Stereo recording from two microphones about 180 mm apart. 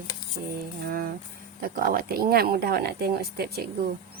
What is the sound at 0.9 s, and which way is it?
Music, 55° right (ahead or behind).